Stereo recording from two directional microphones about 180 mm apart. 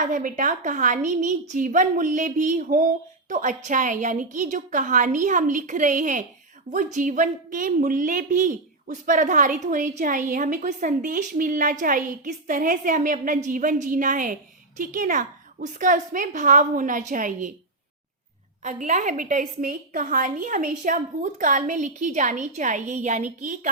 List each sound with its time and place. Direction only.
0.0 s a woman's voice: 45° right (ahead or behind)
18.6 s a woman's voice: 45° right (ahead or behind)